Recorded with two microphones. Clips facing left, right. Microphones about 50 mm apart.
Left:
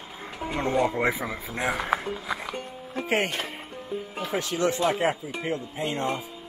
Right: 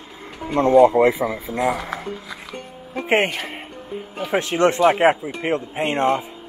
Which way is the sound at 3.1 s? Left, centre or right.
Right.